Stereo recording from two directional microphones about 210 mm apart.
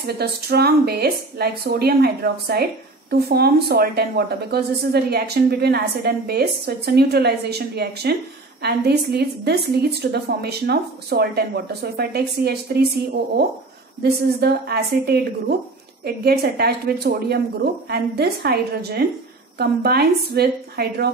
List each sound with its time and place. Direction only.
0.0 s a woman's voice: 50° right (ahead or behind)
14.0 s a woman's voice: 50° right (ahead or behind)
16.3 s a woman's voice: 50° right (ahead or behind)